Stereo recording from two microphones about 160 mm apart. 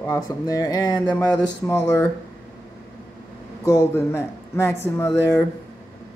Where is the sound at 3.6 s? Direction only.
15° left (ahead or behind).